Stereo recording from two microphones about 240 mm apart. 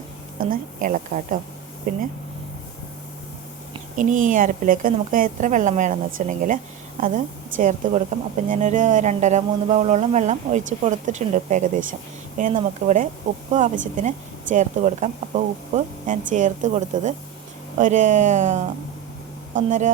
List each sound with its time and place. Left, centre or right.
0.3 s speech: right
3.9 s speech: right